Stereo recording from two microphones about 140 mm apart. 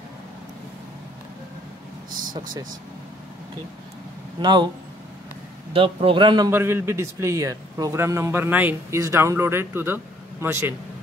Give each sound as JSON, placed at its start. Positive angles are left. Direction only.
{"t": 4.4, "sound": "a man's voice", "side_deg": -30}
{"t": 5.7, "sound": "a man's voice", "side_deg": -40}
{"t": 6.5, "sound": "a man's voice", "side_deg": -15}